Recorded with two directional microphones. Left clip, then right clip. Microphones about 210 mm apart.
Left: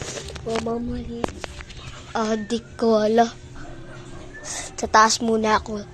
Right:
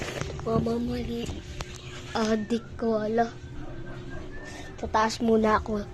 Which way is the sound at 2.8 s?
25° left (ahead or behind).